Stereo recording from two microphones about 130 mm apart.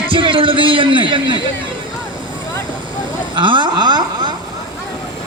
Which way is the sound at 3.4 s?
40° right (ahead or behind).